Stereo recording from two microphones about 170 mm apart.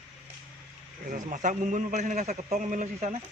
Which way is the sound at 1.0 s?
50° right (ahead or behind).